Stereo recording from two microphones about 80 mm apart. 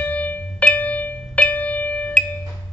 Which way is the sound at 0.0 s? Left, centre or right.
Left.